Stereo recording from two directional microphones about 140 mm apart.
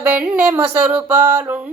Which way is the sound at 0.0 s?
10° right (ahead or behind).